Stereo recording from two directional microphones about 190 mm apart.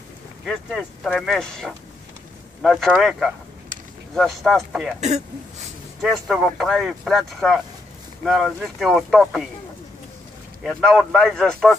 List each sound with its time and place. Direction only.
0.5 s speech: centre (ahead or behind)
5.0 s speech: 35° right (ahead or behind)
6.0 s speech: centre (ahead or behind)
10.6 s speech: centre (ahead or behind)